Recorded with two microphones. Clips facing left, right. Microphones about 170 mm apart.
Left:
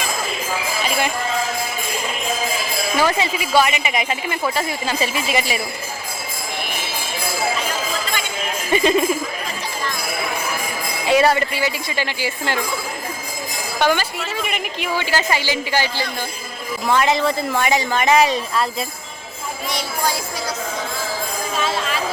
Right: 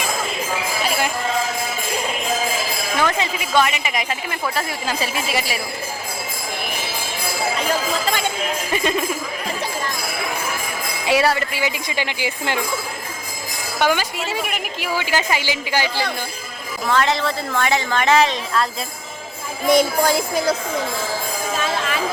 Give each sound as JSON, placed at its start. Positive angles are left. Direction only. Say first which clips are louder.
{"t": 3.0, "sound": "speech", "louder": "left 2 dB", "side_deg": 5}
{"t": 8.7, "sound": "speech", "louder": "left 6 dB", "side_deg": 0}
{"t": 11.0, "sound": "a woman's voice", "louder": "left 3 dB", "side_deg": -10}
{"t": 13.7, "sound": "a woman's voice", "louder": "left 1 dB", "side_deg": -10}
{"t": 16.9, "sound": "a woman's voice", "louder": "left 2 dB", "side_deg": 15}
{"t": 19.6, "sound": "jingle bell", "louder": "right 9 dB", "side_deg": -50}